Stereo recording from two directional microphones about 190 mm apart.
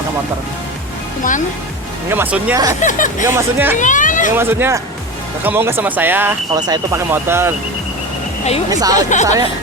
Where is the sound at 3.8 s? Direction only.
40° left (ahead or behind).